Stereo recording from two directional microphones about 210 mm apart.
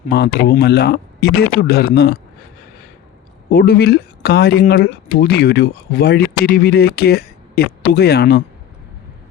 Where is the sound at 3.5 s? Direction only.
45° left (ahead or behind).